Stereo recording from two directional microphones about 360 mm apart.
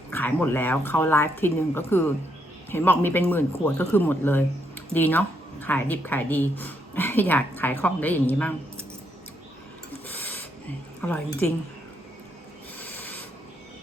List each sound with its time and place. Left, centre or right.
0.1 s speech: centre
10.1 s a sound: centre
11.0 s speech: centre
12.8 s owl: centre